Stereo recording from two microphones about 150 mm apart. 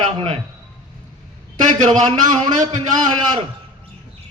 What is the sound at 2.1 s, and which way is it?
A man's voice, 30° right (ahead or behind).